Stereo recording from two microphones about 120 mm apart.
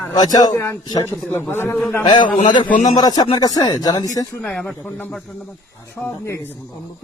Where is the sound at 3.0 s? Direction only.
35° left (ahead or behind).